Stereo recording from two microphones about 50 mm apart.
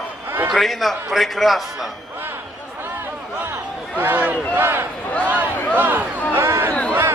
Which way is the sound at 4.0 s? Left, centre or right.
Right.